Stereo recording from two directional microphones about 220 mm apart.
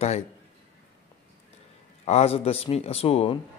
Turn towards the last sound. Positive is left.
turn(degrees=25)  # may be behind; listen again after turning